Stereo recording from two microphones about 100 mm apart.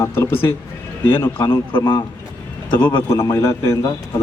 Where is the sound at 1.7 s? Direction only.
55° left (ahead or behind).